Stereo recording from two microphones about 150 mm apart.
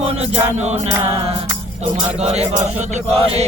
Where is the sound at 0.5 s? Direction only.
50° right (ahead or behind).